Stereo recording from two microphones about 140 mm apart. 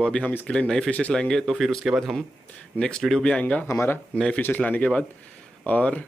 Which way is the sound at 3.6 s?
20° left (ahead or behind).